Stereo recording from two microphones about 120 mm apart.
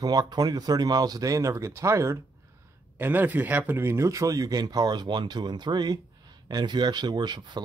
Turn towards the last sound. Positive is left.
turn(degrees=-40)  # may be behind; listen again after turning